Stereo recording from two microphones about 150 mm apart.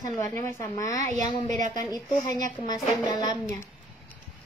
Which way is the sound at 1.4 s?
55° right (ahead or behind).